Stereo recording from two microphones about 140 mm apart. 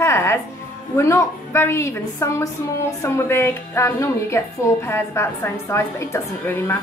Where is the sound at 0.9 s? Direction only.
20° left (ahead or behind).